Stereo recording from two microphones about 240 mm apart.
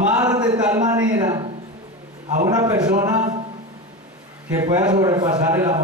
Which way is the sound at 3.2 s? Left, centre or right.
Right.